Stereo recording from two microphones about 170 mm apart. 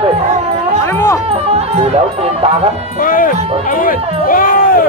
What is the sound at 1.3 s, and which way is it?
Music, 35° right (ahead or behind).